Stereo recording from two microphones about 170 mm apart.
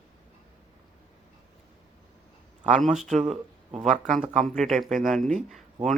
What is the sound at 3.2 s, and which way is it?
Speech, 40° right (ahead or behind).